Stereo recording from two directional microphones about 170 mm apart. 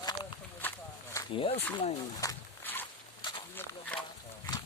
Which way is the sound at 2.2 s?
10° left (ahead or behind).